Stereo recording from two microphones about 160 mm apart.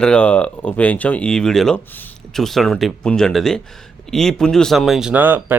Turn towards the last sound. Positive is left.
turn(degrees=-15)  # may be behind; listen again after turning